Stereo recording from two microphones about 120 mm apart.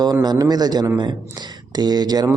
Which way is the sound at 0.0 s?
35° right (ahead or behind).